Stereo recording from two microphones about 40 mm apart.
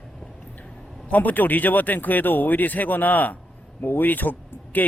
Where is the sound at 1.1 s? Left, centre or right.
Left.